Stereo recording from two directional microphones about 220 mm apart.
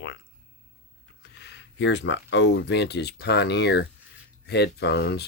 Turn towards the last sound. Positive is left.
turn(degrees=50)  # may be behind; listen again after turning